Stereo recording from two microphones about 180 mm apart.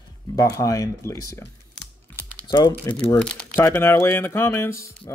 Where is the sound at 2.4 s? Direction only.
25° left (ahead or behind).